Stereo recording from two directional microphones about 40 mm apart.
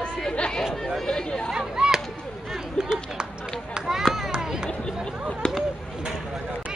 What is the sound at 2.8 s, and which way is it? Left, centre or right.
Speech, centre.